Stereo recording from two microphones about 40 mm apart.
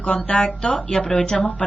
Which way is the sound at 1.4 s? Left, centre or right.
Left.